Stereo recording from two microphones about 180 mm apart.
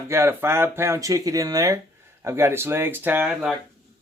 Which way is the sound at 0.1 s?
15° right (ahead or behind).